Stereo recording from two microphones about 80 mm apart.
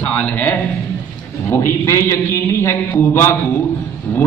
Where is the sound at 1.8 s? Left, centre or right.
Left.